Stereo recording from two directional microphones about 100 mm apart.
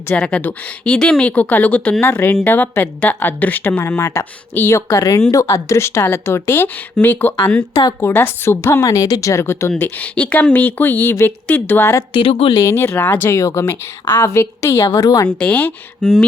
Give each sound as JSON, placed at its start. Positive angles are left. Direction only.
{"t": 0.2, "sound": "a woman's voice", "side_deg": 15}
{"t": 7.7, "sound": "a woman's voice", "side_deg": 40}
{"t": 8.0, "sound": "speech", "side_deg": 20}
{"t": 12.1, "sound": "speech", "side_deg": 70}
{"t": 12.5, "sound": "a woman's voice", "side_deg": 30}
{"t": 15.4, "sound": "a woman's voice", "side_deg": 15}